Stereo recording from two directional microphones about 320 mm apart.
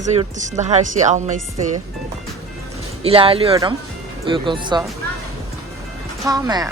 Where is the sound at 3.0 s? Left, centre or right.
Centre.